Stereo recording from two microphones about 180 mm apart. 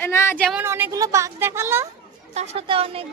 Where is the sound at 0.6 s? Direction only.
15° right (ahead or behind).